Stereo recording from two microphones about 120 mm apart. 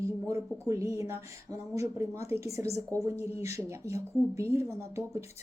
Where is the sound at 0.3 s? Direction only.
25° right (ahead or behind).